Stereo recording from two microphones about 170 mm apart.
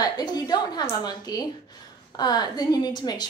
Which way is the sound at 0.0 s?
25° left (ahead or behind).